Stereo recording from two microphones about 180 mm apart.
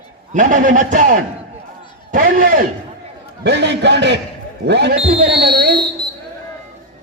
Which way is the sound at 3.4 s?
70° right (ahead or behind).